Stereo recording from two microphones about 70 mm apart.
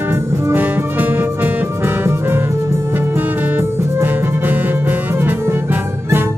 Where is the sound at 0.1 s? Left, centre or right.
Right.